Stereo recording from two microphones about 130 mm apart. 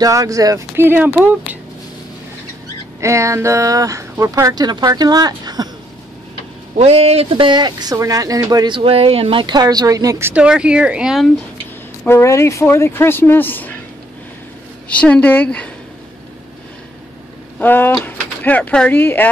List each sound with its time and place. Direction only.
0.0 s speech: 25° right (ahead or behind)
3.0 s speech: 25° right (ahead or behind)
6.8 s speech: 50° right (ahead or behind); by 10.3 s 25° right (ahead or behind)
10.3 s speech: 10° right (ahead or behind)
12.0 s speech: 20° left (ahead or behind)
14.9 s speech: 10° left (ahead or behind)
17.6 s speech: 15° left (ahead or behind)